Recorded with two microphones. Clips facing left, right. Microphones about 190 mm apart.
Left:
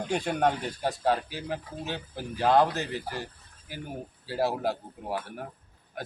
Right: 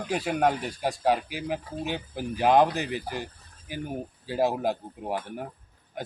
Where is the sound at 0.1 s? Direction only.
5° right (ahead or behind).